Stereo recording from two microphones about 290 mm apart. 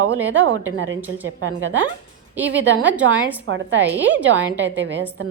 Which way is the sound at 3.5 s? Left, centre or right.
Right.